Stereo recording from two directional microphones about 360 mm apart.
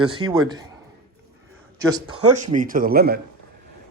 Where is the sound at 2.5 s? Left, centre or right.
Right.